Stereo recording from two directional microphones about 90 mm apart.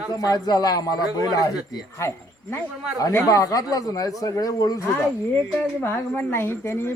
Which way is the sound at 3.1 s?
40° left (ahead or behind).